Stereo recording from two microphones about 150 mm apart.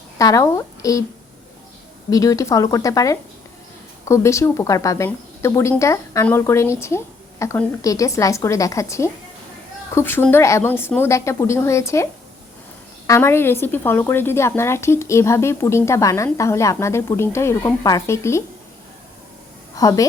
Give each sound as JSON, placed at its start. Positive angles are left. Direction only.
{"t": 0.2, "sound": "speech", "side_deg": 20}
{"t": 2.0, "sound": "a woman's voice", "side_deg": 20}
{"t": 13.1, "sound": "speech", "side_deg": 15}
{"t": 19.7, "sound": "a woman's voice", "side_deg": 25}